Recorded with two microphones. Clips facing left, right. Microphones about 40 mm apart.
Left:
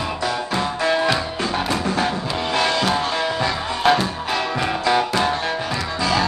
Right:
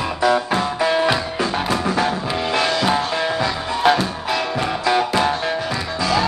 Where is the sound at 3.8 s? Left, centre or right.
Centre.